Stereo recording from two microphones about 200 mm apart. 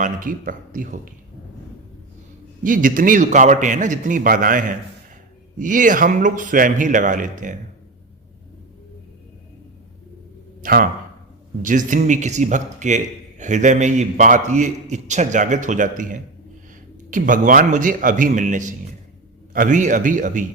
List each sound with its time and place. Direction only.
0.0 s a man's voice: 45° right (ahead or behind)
2.6 s a man's voice: 45° right (ahead or behind)
10.6 s a man's voice: 45° right (ahead or behind)